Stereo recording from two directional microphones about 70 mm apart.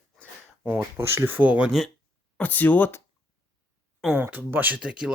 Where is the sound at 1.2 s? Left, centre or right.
Right.